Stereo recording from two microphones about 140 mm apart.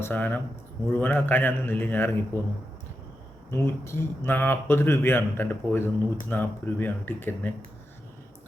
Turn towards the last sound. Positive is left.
turn(degrees=15)  # may be behind; listen again after turning